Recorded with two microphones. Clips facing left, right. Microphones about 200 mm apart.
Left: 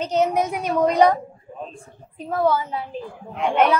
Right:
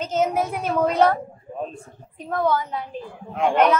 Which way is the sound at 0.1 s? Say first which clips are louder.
Left 1 dB; 5° right (ahead or behind).